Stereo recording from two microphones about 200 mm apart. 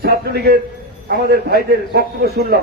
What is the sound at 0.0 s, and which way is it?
A man's voice, 50° right (ahead or behind).